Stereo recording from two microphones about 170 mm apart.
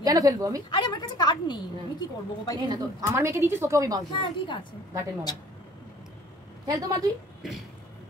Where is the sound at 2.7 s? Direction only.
15° right (ahead or behind).